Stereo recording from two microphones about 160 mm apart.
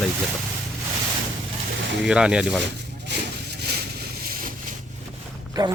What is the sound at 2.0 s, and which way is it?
Speech, 5° right (ahead or behind).